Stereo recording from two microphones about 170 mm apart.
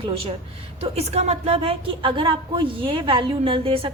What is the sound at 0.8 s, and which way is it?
A woman's voice, 40° right (ahead or behind).